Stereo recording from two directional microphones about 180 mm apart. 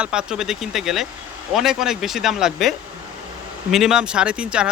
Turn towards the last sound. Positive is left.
turn(degrees=-5)  # may be behind; listen again after turning